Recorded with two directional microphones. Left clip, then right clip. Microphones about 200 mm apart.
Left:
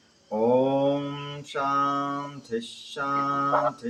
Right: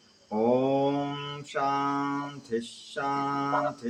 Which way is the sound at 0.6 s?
20° right (ahead or behind).